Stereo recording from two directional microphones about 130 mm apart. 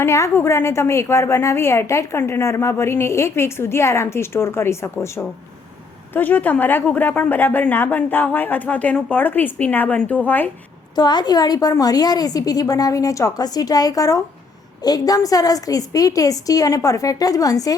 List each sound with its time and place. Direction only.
0.0 s a woman's voice: 20° left (ahead or behind)
10.9 s a woman's voice: 35° left (ahead or behind)